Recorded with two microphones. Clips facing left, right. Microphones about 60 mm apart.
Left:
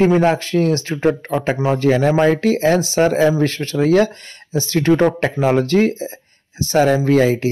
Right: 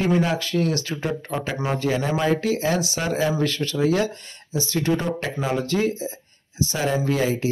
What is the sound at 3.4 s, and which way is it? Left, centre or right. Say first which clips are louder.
Speech: left 5 dB; left.